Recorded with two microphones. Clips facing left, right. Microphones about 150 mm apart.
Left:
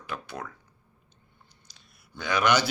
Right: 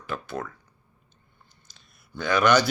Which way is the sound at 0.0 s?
10° left (ahead or behind).